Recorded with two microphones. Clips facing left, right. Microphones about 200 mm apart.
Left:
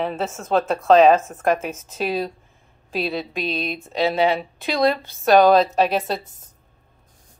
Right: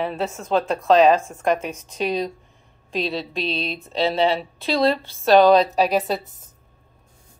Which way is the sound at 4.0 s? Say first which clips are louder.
Left 1 dB; 30° right (ahead or behind).